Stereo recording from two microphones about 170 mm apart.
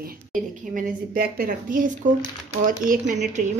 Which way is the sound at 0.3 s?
55° right (ahead or behind).